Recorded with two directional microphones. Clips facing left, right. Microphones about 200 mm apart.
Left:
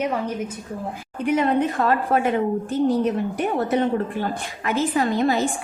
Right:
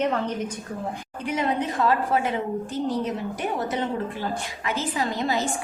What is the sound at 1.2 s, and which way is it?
Speech, 55° left (ahead or behind).